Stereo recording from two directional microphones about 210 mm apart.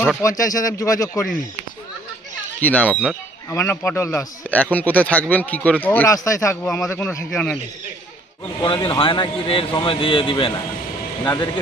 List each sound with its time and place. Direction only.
0.2 s a man's voice: 15° left (ahead or behind)
2.6 s a man's voice: 5° left (ahead or behind)
8.5 s speech: 20° left (ahead or behind)